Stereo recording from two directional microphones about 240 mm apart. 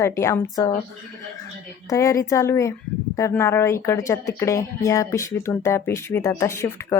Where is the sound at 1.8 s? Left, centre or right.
Centre.